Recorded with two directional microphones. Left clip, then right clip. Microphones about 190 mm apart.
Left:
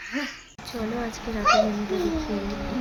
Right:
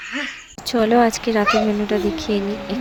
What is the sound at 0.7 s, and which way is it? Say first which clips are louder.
Speech: right 15 dB; 45° right (ahead or behind).